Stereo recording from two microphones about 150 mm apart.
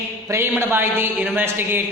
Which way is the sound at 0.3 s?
15° right (ahead or behind).